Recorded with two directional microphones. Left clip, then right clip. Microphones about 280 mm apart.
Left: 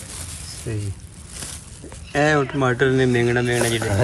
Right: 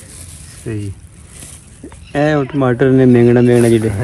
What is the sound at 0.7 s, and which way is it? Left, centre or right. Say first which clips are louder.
Speech: right 7 dB; centre.